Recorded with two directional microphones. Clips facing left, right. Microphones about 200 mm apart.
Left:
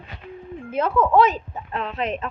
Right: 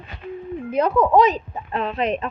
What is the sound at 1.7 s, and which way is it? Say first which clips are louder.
Speech: right 4 dB; 35° right (ahead or behind).